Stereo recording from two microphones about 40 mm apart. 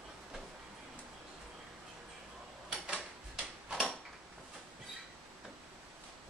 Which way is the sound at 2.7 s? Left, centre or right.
Right.